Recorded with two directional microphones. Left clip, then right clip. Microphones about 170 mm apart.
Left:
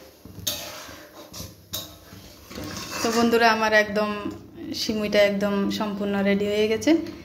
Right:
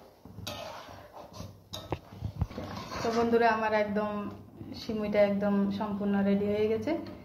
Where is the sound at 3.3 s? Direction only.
60° left (ahead or behind).